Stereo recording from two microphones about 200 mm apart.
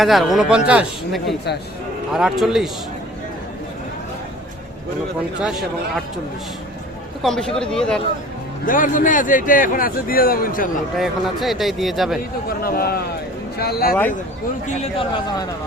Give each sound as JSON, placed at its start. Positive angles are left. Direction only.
{"t": 0.0, "sound": "a man's voice", "side_deg": 0}
{"t": 7.2, "sound": "a man's voice", "side_deg": 0}
{"t": 8.6, "sound": "a man's voice", "side_deg": 40}
{"t": 10.9, "sound": "a man's voice", "side_deg": 0}
{"t": 12.6, "sound": "a man's voice", "side_deg": 50}
{"t": 14.9, "sound": "a man's voice", "side_deg": 20}